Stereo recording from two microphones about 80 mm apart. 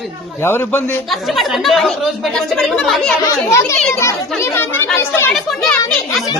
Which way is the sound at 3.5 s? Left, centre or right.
Left.